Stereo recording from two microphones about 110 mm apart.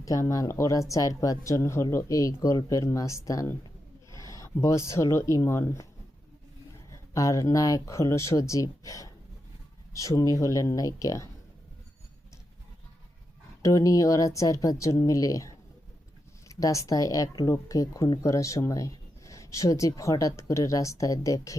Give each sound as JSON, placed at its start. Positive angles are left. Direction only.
{"t": 0.0, "sound": "speech", "side_deg": 30}
{"t": 6.9, "sound": "speech", "side_deg": 30}
{"t": 13.6, "sound": "speech", "side_deg": 30}